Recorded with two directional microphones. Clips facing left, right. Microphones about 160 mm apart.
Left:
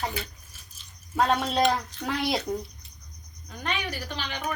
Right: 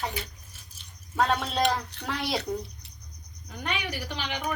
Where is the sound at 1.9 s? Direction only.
70° right (ahead or behind).